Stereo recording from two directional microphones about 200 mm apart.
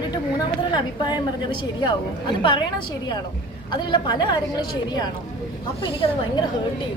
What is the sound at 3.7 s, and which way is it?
A woman's voice, 20° left (ahead or behind).